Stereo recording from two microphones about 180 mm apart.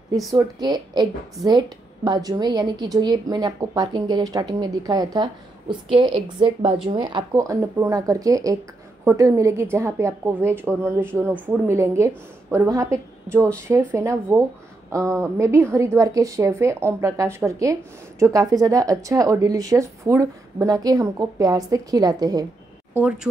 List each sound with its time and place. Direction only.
0.3 s a woman's voice: 20° right (ahead or behind)
22.9 s a woman's voice: 10° right (ahead or behind)